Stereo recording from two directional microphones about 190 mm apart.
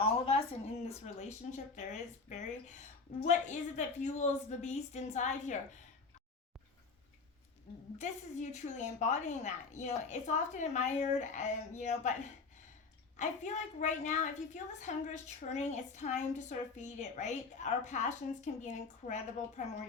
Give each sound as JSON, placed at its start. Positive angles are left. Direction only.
{"t": 0.9, "sound": "a woman's voice", "side_deg": 35}
{"t": 7.9, "sound": "a woman's voice", "side_deg": 40}